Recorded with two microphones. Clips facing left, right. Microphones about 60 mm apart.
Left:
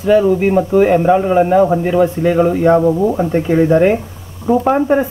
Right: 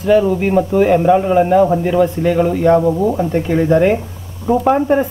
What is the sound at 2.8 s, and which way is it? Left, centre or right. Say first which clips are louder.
Speech: left 2 dB; centre.